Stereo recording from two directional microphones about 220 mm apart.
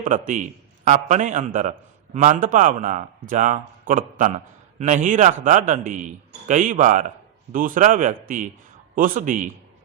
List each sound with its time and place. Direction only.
0.0 s a man's voice: 35° right (ahead or behind)